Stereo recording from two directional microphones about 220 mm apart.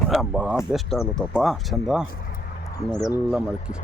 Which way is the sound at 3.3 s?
5° right (ahead or behind).